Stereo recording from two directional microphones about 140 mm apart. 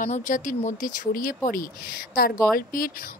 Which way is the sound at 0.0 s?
70° left (ahead or behind).